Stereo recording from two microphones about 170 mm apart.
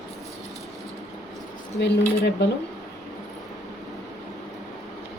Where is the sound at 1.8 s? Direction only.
90° left.